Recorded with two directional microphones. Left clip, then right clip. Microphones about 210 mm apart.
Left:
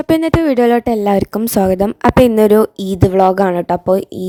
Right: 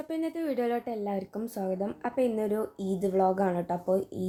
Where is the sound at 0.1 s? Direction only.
50° left (ahead or behind).